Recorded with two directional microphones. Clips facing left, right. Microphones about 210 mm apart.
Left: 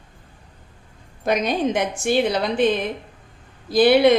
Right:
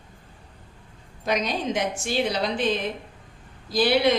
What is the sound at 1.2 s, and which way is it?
A woman's voice, 55° left (ahead or behind).